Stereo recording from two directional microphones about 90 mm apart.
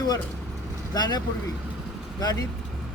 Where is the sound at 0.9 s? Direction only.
50° left (ahead or behind).